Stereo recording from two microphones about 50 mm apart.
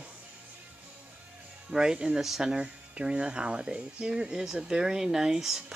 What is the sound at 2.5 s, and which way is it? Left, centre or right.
Speech, right.